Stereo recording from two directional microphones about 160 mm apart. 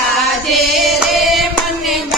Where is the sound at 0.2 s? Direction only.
Centre (ahead or behind).